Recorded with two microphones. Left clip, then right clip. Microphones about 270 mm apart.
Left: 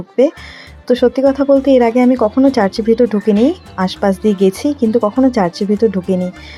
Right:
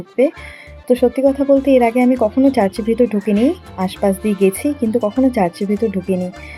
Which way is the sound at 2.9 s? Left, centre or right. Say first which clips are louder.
Left 5 dB; left.